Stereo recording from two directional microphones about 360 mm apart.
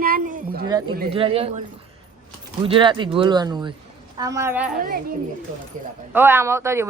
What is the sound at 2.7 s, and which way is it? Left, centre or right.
Speech, centre.